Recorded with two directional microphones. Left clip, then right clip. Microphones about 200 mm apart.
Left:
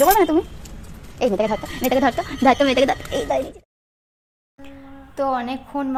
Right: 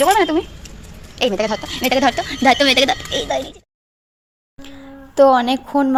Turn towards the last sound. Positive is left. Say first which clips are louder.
# right 9 dB
turn(degrees=-35)  # may be behind; listen again after turning